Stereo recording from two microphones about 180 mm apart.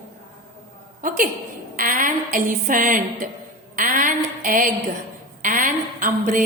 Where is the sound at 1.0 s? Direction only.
50° right (ahead or behind).